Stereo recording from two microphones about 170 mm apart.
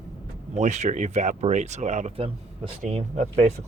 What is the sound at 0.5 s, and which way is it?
Speech, 45° right (ahead or behind).